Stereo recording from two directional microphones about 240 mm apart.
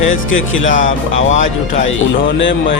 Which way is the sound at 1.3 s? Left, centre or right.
Left.